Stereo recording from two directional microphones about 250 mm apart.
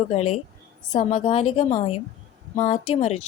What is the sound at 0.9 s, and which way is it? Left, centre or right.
A woman's voice, left.